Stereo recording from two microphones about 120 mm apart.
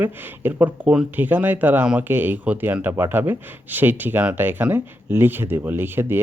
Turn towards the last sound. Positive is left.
turn(degrees=-20)  # may be behind; listen again after turning